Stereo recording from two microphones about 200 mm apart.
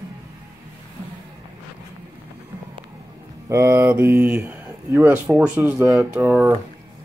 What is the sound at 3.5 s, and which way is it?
Speech, 15° right (ahead or behind).